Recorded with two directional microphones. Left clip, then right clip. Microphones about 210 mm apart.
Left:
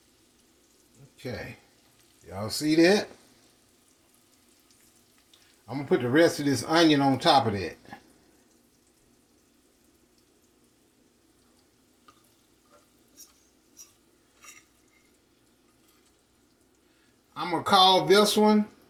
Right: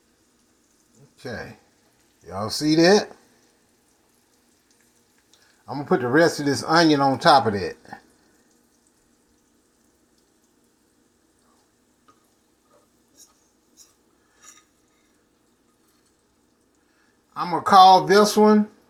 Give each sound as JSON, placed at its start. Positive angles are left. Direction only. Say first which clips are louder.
{"t": 1.1, "sound": "speech", "louder": "right 3 dB", "side_deg": -20}
{"t": 5.6, "sound": "speech", "louder": "right 4 dB", "side_deg": -20}
{"t": 17.3, "sound": "speech", "louder": "right 8 dB", "side_deg": -15}